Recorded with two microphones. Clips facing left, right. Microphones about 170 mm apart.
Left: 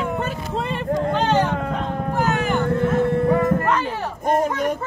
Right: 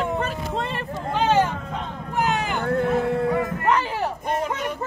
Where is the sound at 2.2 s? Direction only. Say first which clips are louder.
Left 2 dB; 15° right (ahead or behind).